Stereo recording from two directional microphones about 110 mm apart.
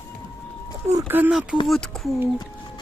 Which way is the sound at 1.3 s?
5° right (ahead or behind).